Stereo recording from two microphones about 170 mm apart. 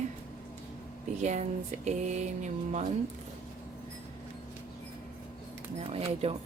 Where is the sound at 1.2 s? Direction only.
45° right (ahead or behind).